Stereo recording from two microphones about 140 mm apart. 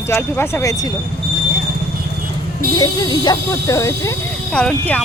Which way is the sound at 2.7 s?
30° left (ahead or behind).